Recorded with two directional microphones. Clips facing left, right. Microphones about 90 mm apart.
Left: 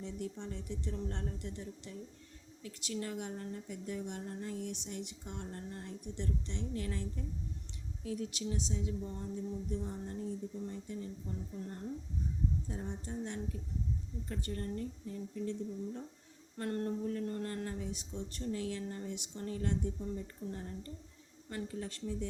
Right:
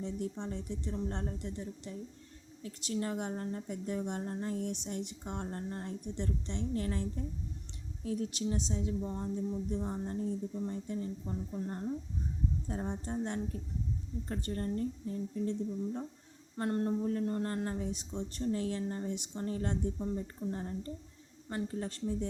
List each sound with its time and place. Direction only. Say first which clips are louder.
0.0 s a woman's voice: right 4 dB; 30° right (ahead or behind)
17.0 s speech: right 4 dB; 35° right (ahead or behind)